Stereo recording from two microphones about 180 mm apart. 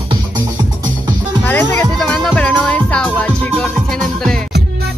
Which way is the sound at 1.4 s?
10° left (ahead or behind).